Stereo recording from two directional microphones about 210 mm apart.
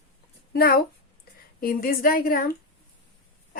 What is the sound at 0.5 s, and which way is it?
A woman's voice, 45° left (ahead or behind).